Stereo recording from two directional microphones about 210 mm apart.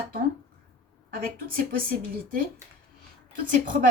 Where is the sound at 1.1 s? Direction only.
45° right (ahead or behind).